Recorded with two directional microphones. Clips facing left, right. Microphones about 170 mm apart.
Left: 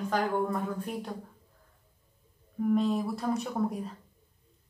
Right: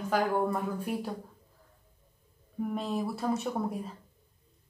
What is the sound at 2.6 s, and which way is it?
Speech, centre (ahead or behind).